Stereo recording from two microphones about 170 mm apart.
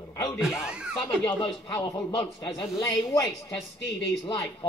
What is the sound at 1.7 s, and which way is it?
A man's voice, 15° left (ahead or behind).